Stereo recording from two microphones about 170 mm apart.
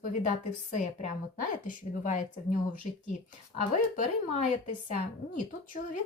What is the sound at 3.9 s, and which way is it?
Speech, 45° left (ahead or behind).